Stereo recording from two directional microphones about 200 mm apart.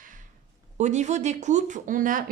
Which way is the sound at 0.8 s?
35° right (ahead or behind).